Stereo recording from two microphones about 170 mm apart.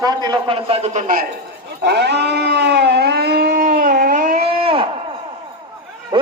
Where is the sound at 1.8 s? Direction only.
80° right; by 4.3 s 55° right (ahead or behind).